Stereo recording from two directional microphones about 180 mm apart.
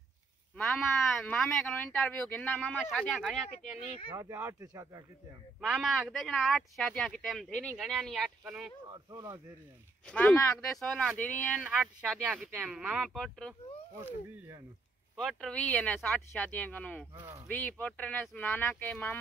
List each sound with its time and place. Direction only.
0.6 s speech: centre (ahead or behind)
3.7 s speech: 10° right (ahead or behind)
5.6 s speech: centre (ahead or behind)
9.1 s speech: 20° right (ahead or behind)
10.0 s speech: 10° left (ahead or behind)
11.6 s speech: 5° right (ahead or behind)
15.1 s speech: centre (ahead or behind)
17.2 s speech: 15° right (ahead or behind)
17.5 s speech: 10° left (ahead or behind)